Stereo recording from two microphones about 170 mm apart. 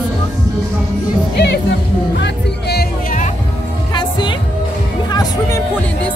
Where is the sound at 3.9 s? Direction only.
30° left (ahead or behind).